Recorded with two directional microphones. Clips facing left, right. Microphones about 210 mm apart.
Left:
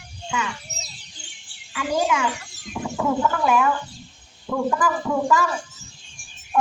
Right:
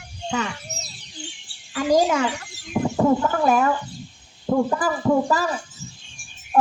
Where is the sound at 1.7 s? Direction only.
40° right (ahead or behind).